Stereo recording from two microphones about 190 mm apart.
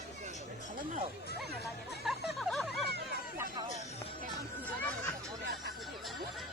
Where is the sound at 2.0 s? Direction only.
Centre (ahead or behind).